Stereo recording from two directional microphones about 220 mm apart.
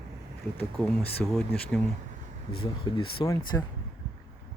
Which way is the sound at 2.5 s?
20° left (ahead or behind).